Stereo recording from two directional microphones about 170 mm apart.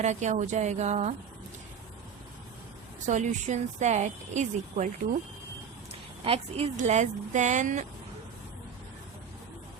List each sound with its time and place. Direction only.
0.0 s speech: 45° right (ahead or behind)
3.1 s speech: 45° right (ahead or behind)
6.2 s a woman's voice: 35° right (ahead or behind)